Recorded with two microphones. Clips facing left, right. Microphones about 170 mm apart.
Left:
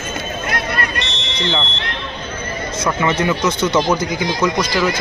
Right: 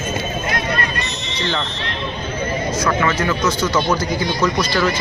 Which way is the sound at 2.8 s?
20° left (ahead or behind).